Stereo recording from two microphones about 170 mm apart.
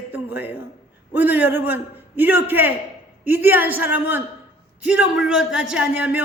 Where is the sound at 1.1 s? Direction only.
10° right (ahead or behind).